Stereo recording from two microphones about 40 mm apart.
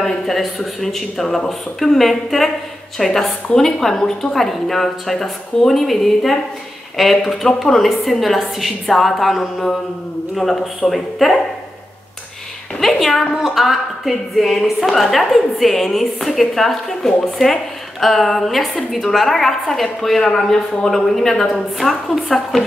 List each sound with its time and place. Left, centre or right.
0.0 s a woman's voice: centre
1.2 s speech: centre
1.8 s a woman's voice: centre
10.9 s a woman's voice: centre
12.8 s speech: centre
13.3 s a woman's voice: centre